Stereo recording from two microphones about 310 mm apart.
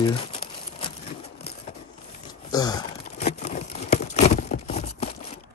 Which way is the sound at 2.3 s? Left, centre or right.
Centre.